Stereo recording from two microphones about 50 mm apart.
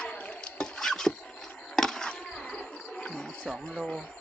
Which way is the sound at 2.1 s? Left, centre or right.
Centre.